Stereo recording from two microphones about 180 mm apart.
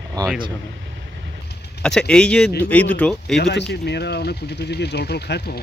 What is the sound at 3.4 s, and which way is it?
Speech, 70° left (ahead or behind).